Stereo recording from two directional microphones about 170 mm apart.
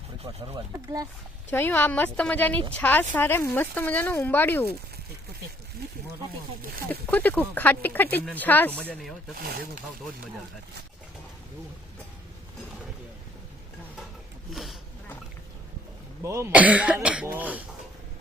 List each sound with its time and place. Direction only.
0.3 s speech: 35° right (ahead or behind)
1.5 s speech: 10° left (ahead or behind)
7.1 s speech: 10° left (ahead or behind)
9.4 s speech: 60° right (ahead or behind)
14.5 s a sound: centre (ahead or behind)
16.2 s speech: 15° right (ahead or behind)